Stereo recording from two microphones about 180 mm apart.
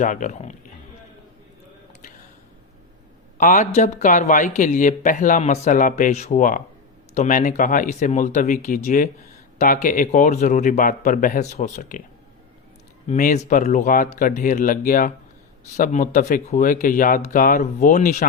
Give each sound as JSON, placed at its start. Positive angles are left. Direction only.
{"t": 0.0, "sound": "speech", "side_deg": 45}
{"t": 3.3, "sound": "speech", "side_deg": 45}
{"t": 13.1, "sound": "speech", "side_deg": 45}